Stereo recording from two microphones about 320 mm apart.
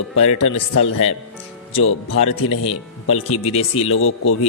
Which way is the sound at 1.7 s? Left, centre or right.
Left.